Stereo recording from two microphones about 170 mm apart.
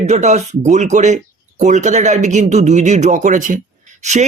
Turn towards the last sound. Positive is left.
turn(degrees=-45)  # may be behind; listen again after turning